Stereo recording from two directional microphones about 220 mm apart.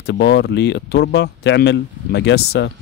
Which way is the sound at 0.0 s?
50° left (ahead or behind).